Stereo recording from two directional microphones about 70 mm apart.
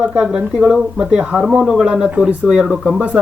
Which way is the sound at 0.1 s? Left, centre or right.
Centre.